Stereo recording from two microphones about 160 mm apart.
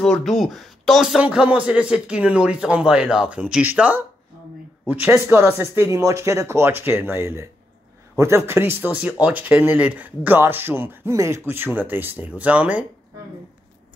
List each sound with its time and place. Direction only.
0.0 s speech: centre (ahead or behind)